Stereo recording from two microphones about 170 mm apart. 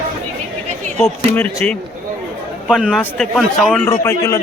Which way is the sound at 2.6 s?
5° right (ahead or behind).